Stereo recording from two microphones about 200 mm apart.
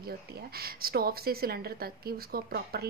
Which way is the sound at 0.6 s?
50° right (ahead or behind).